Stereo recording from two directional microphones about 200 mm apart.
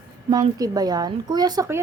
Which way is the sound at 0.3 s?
20° right (ahead or behind).